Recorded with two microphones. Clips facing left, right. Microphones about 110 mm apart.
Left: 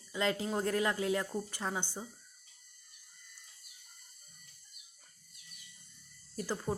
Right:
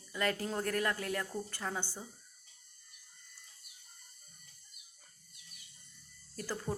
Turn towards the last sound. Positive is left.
turn(degrees=15)  # may be behind; listen again after turning